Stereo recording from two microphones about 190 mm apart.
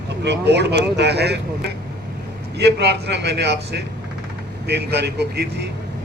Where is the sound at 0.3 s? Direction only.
65° right (ahead or behind).